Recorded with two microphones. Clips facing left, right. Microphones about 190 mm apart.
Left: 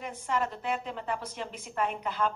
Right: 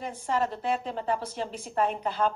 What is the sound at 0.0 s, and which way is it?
A woman's voice, 30° right (ahead or behind).